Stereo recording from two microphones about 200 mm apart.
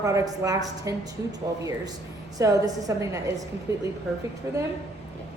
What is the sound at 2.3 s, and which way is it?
A woman's voice, 15° right (ahead or behind).